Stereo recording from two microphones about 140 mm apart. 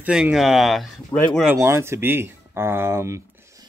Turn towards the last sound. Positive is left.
turn(degrees=-20)  # may be behind; listen again after turning